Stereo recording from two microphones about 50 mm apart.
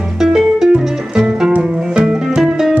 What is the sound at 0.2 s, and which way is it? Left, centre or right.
Music, centre.